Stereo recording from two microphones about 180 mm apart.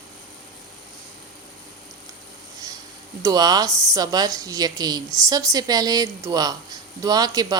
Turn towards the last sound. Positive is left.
turn(degrees=-20)  # may be behind; listen again after turning